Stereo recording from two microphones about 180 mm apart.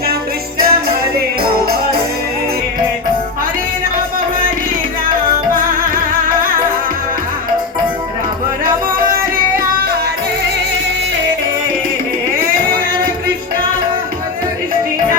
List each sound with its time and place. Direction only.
0.6 s music: 60° right (ahead or behind)